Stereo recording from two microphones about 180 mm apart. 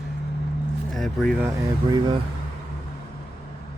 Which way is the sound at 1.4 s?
20° right (ahead or behind).